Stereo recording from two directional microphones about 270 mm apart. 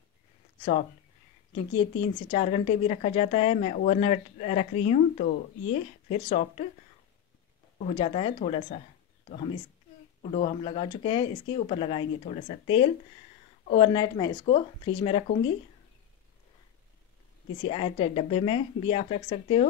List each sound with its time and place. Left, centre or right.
1.5 s a woman's voice: centre
7.8 s a woman's voice: left
10.2 s a woman's voice: left
17.6 s a woman's voice: centre